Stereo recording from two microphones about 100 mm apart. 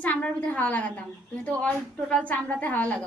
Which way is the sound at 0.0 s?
15° left (ahead or behind).